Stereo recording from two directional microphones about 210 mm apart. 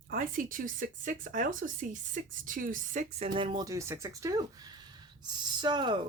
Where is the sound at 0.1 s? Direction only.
40° right (ahead or behind).